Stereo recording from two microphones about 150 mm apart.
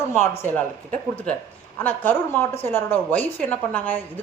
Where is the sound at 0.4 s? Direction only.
10° left (ahead or behind).